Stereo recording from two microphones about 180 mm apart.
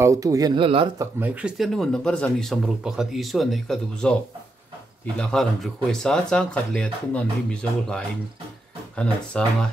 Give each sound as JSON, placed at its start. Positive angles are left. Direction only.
{"t": 0.0, "sound": "speech", "side_deg": -20}
{"t": 0.9, "sound": "speech", "side_deg": -10}
{"t": 8.9, "sound": "speech", "side_deg": 5}